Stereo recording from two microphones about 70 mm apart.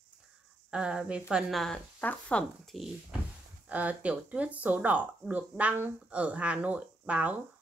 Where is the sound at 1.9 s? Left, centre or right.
Centre.